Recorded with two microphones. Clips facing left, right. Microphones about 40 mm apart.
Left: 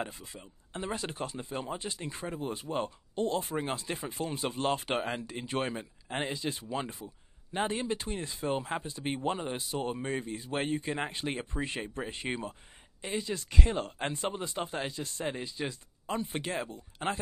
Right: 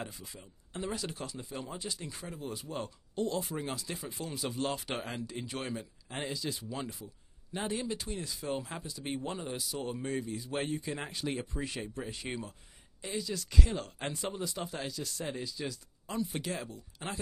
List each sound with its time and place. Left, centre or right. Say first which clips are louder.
0.0 s speech: left 4 dB; left